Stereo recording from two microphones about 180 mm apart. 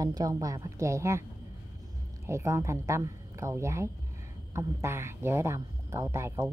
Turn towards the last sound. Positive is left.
turn(degrees=-15)  # may be behind; listen again after turning